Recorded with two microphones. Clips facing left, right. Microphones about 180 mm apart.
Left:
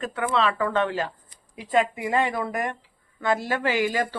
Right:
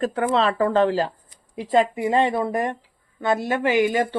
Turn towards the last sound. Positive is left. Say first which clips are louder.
# right 5 dB
turn(degrees=-20)  # may be behind; listen again after turning